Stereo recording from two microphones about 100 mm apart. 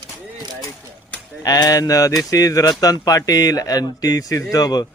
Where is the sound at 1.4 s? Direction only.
40° left (ahead or behind).